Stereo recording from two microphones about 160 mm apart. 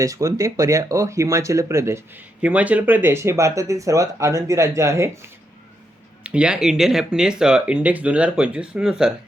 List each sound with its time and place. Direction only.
0.0 s speech: 20° right (ahead or behind)
6.2 s speech: 5° right (ahead or behind)